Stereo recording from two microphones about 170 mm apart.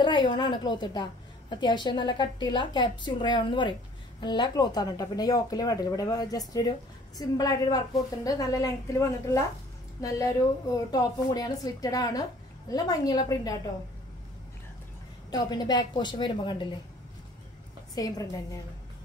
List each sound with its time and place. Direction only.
0.0 s a woman's voice: 25° left (ahead or behind)
15.3 s a woman's voice: 25° left (ahead or behind)
17.9 s a woman's voice: 20° left (ahead or behind)